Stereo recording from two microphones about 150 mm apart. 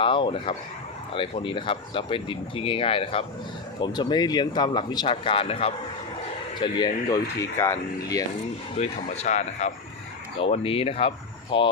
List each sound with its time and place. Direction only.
0.0 s speech: 35° left (ahead or behind)
3.8 s speech: 30° left (ahead or behind)
6.6 s speech: 30° left (ahead or behind)
8.7 s speech: 50° left (ahead or behind)
10.3 s speech: 40° left (ahead or behind)